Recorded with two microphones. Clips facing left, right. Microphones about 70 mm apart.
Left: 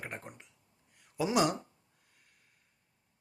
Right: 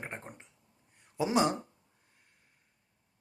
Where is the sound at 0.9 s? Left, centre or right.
Right.